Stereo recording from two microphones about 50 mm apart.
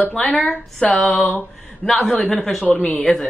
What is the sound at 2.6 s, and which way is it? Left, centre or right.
Speech, left.